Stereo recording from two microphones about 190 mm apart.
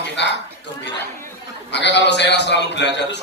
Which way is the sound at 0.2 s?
65° left (ahead or behind).